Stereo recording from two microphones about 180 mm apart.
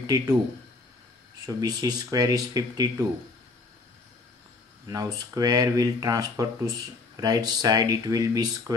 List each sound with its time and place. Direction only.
1.4 s speech: 20° right (ahead or behind)
4.8 s speech: 20° right (ahead or behind)